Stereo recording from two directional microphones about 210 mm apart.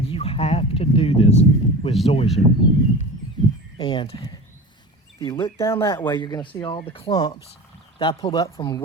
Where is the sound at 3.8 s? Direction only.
25° left (ahead or behind).